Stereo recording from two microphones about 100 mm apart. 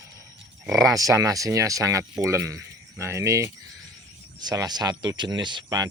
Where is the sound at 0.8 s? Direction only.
35° right (ahead or behind).